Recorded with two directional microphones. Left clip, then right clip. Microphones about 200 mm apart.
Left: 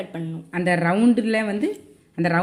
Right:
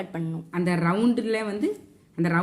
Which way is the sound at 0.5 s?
30° left (ahead or behind).